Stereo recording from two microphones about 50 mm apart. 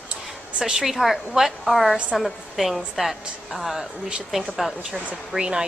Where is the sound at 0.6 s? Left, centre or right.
Centre.